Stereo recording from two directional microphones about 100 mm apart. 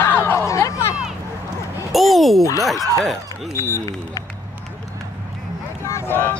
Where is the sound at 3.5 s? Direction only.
30° left (ahead or behind).